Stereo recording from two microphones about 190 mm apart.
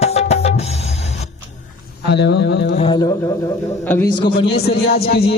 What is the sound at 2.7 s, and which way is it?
Speech, 25° left (ahead or behind).